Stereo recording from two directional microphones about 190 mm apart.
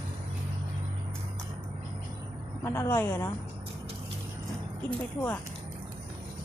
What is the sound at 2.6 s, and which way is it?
Speech, 10° left (ahead or behind).